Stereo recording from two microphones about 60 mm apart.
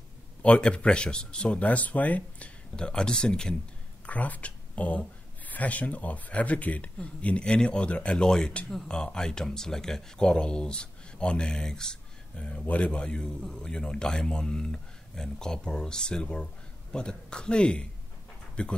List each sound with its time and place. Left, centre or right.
0.4 s speech: centre
4.0 s speech: left